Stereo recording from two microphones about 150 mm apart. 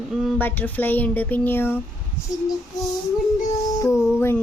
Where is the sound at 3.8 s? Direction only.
20° left (ahead or behind).